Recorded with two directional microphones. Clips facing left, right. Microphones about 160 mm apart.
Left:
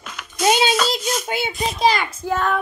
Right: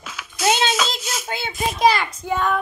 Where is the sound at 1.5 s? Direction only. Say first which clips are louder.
Right 2 dB; centre (ahead or behind).